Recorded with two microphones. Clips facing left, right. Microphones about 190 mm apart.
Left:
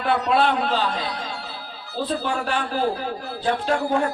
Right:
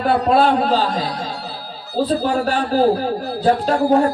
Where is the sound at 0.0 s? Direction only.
40° right (ahead or behind).